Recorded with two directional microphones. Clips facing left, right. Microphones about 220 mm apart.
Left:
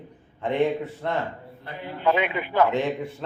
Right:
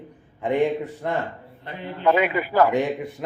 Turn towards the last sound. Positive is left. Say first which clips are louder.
# right 2 dB
turn(degrees=-15)  # may be behind; listen again after turning